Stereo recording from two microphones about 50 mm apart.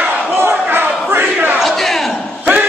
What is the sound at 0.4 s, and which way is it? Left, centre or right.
Crowd, right.